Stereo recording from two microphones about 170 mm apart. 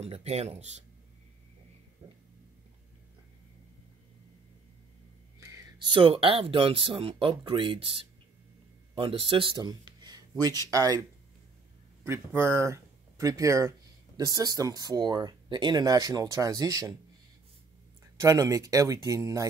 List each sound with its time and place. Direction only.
0.0 s speech: 40° right (ahead or behind)
5.4 s a sound: 15° right (ahead or behind)
5.9 s speech: 30° right (ahead or behind)
18.2 s speech: 20° right (ahead or behind)